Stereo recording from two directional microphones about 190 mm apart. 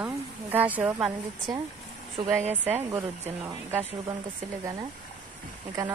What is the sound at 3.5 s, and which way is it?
Speech, 15° right (ahead or behind).